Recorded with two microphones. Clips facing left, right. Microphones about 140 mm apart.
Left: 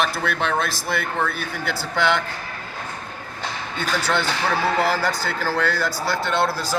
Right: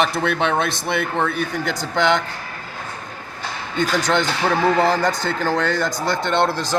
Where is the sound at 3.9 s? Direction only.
15° right (ahead or behind).